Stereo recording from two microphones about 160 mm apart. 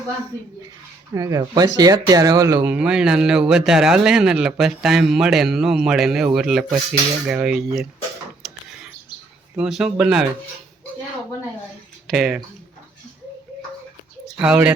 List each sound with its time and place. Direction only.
1.1 s speech: 20° right (ahead or behind)
2.6 s speech: 5° right (ahead or behind)
8.4 s a sound: centre (ahead or behind)
9.6 s speech: 5° right (ahead or behind)
12.0 s speech: centre (ahead or behind)
14.3 s speech: 5° right (ahead or behind)